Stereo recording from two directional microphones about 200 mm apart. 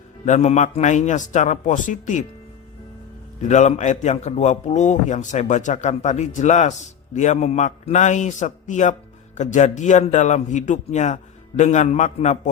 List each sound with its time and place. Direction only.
0.3 s a man's voice: 35° left (ahead or behind)
3.4 s a man's voice: 35° left (ahead or behind)